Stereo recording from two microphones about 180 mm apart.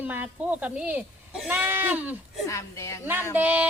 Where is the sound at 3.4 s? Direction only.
10° right (ahead or behind).